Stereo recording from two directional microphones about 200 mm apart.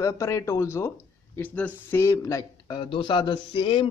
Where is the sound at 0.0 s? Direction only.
15° left (ahead or behind).